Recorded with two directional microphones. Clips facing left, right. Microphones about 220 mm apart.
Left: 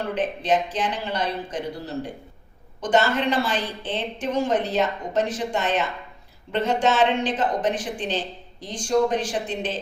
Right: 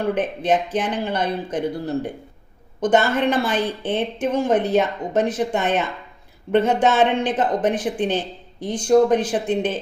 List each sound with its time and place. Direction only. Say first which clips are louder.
0.1 s a woman's voice: right 1 dB; 55° right (ahead or behind)